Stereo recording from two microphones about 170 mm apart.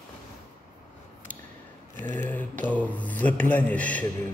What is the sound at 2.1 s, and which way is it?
Speech, 10° left (ahead or behind).